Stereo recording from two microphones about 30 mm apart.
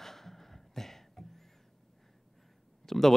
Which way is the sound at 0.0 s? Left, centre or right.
Centre.